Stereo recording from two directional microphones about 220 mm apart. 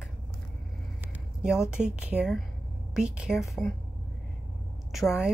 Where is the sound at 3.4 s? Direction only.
10° left (ahead or behind).